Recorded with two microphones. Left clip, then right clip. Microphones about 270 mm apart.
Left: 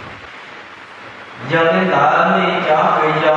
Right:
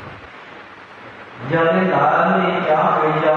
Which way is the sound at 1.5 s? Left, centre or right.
Centre.